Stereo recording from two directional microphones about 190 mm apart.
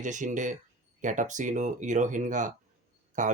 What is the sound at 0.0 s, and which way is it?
Speech, 40° right (ahead or behind).